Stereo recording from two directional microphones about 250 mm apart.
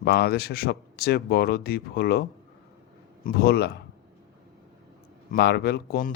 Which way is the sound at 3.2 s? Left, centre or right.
Left.